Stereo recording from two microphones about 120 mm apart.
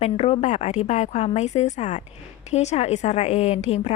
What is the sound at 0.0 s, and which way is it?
A woman's voice, 60° left (ahead or behind).